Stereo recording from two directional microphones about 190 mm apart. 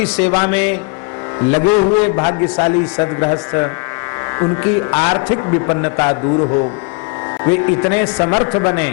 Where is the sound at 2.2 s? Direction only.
25° left (ahead or behind).